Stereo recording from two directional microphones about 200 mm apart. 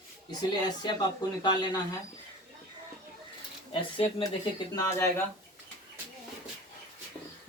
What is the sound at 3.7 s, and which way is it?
Speech, 25° left (ahead or behind).